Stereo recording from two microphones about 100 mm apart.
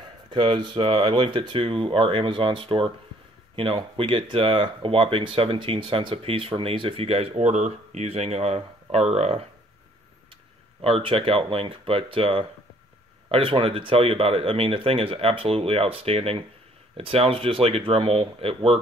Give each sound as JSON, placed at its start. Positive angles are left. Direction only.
{"t": 0.3, "sound": "speech", "side_deg": -55}
{"t": 8.1, "sound": "speech", "side_deg": -90}
{"t": 10.8, "sound": "speech", "side_deg": -65}